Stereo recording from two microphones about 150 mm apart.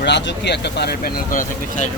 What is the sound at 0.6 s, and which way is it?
Speech, 90° left.